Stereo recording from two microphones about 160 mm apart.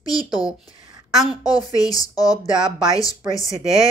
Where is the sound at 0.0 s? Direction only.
25° left (ahead or behind).